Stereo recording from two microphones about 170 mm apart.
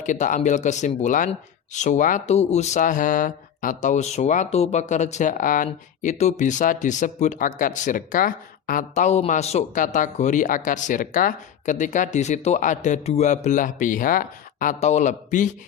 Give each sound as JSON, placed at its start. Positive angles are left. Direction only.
{"t": 0.0, "sound": "speech", "side_deg": 50}